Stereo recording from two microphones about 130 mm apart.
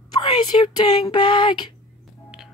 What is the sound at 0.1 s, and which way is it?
Speech, 35° left (ahead or behind).